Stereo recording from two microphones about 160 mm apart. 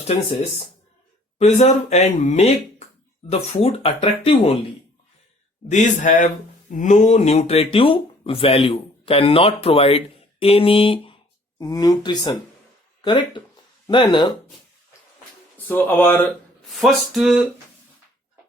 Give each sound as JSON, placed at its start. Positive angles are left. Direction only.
{"t": 1.4, "sound": "speech", "side_deg": 45}
{"t": 5.6, "sound": "speech", "side_deg": 50}
{"t": 11.6, "sound": "speech", "side_deg": 25}
{"t": 15.5, "sound": "speech", "side_deg": 10}
{"t": 16.7, "sound": "a sound", "side_deg": 0}